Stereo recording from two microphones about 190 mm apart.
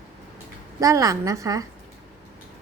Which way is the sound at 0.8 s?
15° right (ahead or behind).